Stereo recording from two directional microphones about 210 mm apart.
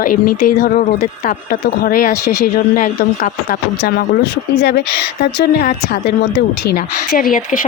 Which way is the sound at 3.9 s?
50° left (ahead or behind).